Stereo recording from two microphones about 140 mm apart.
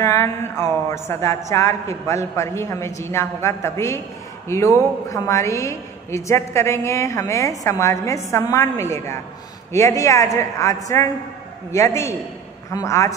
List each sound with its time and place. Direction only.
0.0 s a woman's voice: 20° left (ahead or behind)